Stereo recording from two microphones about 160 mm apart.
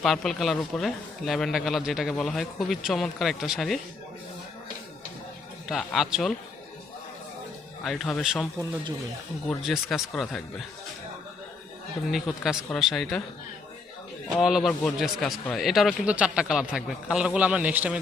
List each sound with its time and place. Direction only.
0.0 s a man's voice: 5° left (ahead or behind)
5.6 s a man's voice: centre (ahead or behind)
7.9 s a man's voice: centre (ahead or behind)
9.5 s a man's voice: centre (ahead or behind)
12.1 s a man's voice: centre (ahead or behind)
14.4 s a man's voice: centre (ahead or behind)